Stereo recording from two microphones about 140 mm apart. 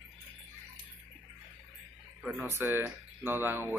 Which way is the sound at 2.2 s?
15° right (ahead or behind).